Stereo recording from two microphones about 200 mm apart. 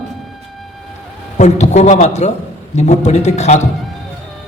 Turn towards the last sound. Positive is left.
turn(degrees=35)  # may be behind; listen again after turning